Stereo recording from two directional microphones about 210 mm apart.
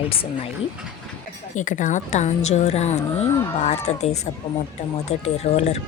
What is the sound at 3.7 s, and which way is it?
A woman's voice, 30° left (ahead or behind).